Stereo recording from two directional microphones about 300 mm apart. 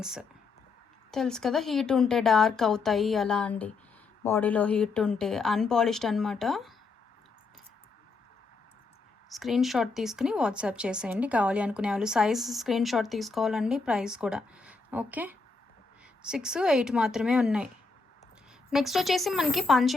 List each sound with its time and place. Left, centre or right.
0.0 s a woman's voice: centre
9.3 s a woman's voice: centre
18.7 s a woman's voice: centre